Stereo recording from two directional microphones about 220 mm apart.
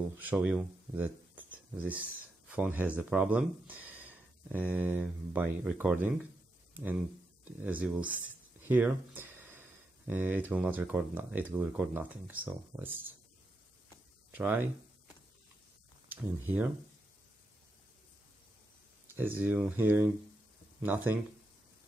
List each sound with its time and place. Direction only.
0.2 s speech: 5° right (ahead or behind)
6.7 s a sound: 5° right (ahead or behind)
7.6 s speech: 5° right (ahead or behind)
8.6 s a sound: 10° right (ahead or behind)
10.0 s speech: 10° right (ahead or behind)
14.3 s speech: 10° right (ahead or behind)
16.1 s speech: 5° right (ahead or behind)
19.0 s speech: 10° right (ahead or behind)